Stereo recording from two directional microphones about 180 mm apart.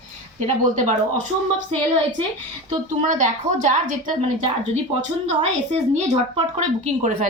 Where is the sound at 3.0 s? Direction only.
45° right (ahead or behind).